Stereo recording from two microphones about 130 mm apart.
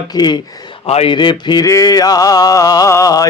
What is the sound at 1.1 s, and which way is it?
Speech, 35° left (ahead or behind).